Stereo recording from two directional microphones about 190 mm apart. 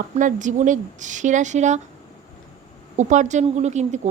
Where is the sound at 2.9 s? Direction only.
40° right (ahead or behind).